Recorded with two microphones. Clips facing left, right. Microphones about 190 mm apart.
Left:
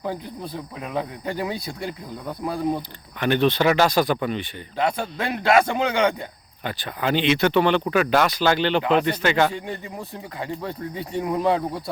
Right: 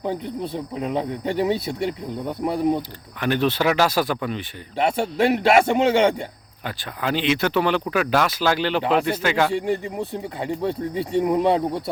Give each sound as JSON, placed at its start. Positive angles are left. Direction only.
{"t": 0.0, "sound": "speech", "side_deg": -25}
{"t": 3.2, "sound": "speech", "side_deg": 0}
{"t": 4.8, "sound": "speech", "side_deg": -25}
{"t": 6.7, "sound": "speech", "side_deg": 0}
{"t": 10.0, "sound": "speech", "side_deg": -25}